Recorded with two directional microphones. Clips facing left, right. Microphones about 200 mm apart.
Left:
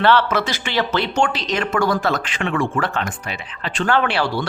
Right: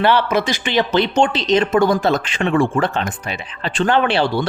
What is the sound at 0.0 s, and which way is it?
A man's voice, 15° right (ahead or behind).